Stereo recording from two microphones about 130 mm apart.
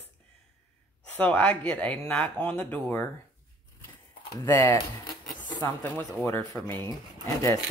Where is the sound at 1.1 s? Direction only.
10° left (ahead or behind).